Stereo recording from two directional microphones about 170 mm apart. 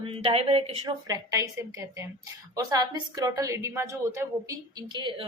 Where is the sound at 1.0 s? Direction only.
20° right (ahead or behind).